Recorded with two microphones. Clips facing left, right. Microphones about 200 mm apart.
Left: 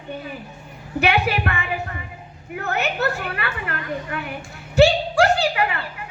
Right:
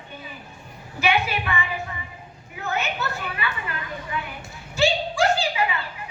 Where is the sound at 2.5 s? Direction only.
65° left (ahead or behind).